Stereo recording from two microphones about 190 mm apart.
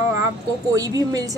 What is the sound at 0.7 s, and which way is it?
Speech, 20° right (ahead or behind).